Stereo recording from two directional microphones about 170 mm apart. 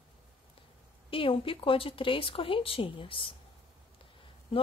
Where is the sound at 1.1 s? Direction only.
30° left (ahead or behind).